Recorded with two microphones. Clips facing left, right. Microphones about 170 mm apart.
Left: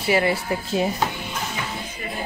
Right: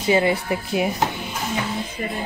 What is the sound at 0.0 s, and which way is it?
Speech, 20° right (ahead or behind).